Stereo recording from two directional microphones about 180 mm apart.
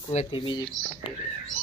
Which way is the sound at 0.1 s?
30° left (ahead or behind).